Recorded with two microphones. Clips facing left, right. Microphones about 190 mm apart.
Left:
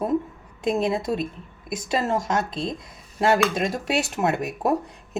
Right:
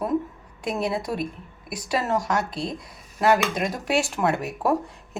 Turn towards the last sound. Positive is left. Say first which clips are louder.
# even
turn(degrees=20)  # may be behind; listen again after turning